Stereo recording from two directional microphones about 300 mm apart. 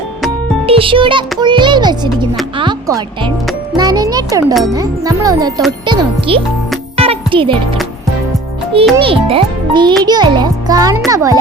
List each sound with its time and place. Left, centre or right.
0.7 s a child's voice: centre
6.9 s music: centre
9.0 s a child's voice: centre